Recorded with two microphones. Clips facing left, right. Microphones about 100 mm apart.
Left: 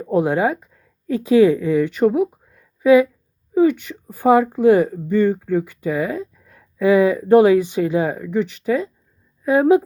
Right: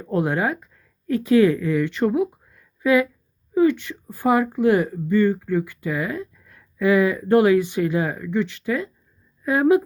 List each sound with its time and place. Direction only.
0.0 s speech: 20° left (ahead or behind)